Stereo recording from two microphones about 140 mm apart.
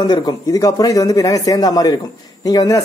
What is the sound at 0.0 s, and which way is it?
Speech, 30° left (ahead or behind).